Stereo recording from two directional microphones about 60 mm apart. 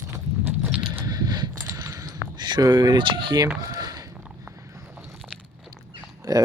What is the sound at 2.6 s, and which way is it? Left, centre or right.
Speech, right.